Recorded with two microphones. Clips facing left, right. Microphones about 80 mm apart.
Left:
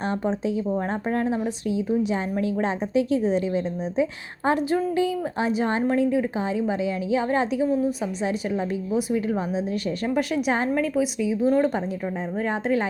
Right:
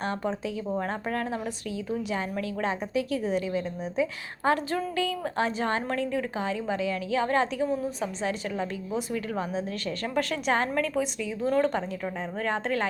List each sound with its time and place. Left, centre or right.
0.1 s a woman's voice: left
7.7 s a woman's voice: centre
8.2 s a woman's voice: centre